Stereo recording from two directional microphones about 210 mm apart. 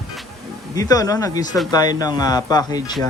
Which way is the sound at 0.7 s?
15° left (ahead or behind).